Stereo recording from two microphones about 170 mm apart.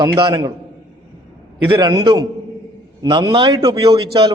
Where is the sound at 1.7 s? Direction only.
25° right (ahead or behind).